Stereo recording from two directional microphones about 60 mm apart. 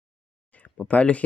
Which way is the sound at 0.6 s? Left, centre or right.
Left.